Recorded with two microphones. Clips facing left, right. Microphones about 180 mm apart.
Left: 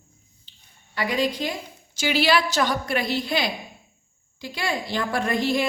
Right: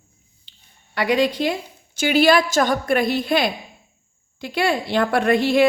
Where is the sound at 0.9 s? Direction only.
70° right (ahead or behind).